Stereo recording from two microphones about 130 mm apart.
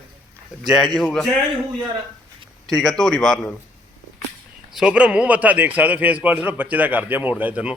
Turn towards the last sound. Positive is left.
turn(degrees=-10)  # may be behind; listen again after turning